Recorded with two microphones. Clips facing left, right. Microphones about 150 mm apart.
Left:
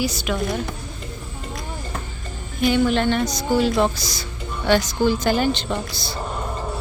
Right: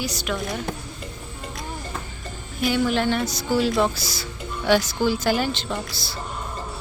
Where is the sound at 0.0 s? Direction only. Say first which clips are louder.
Left 4 dB; centre (ahead or behind).